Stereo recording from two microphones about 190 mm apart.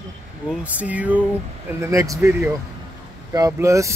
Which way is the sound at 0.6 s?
5° right (ahead or behind).